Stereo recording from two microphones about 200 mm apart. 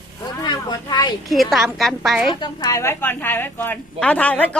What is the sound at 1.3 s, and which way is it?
A woman's voice, centre (ahead or behind).